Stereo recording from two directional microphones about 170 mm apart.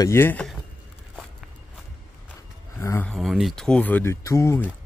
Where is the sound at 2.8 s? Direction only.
15° left (ahead or behind).